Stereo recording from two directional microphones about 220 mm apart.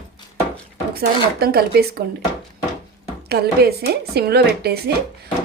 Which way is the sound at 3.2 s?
45° right (ahead or behind).